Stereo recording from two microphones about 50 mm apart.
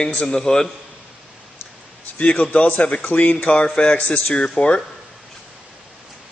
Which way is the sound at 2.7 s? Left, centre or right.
Left.